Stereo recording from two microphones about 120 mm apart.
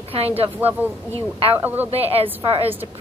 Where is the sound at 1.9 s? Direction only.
55° right (ahead or behind).